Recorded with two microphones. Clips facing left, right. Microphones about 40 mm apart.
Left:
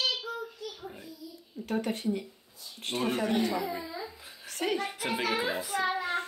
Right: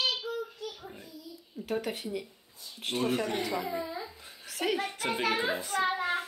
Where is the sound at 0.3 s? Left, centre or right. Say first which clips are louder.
Right 2 dB; left.